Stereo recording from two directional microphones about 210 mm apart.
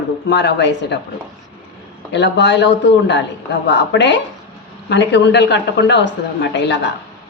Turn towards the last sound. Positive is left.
turn(degrees=55)  # may be behind; listen again after turning